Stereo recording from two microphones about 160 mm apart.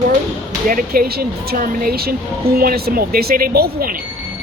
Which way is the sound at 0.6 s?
60° right (ahead or behind).